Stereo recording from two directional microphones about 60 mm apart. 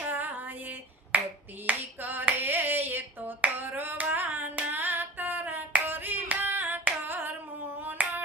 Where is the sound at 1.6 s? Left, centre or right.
Right.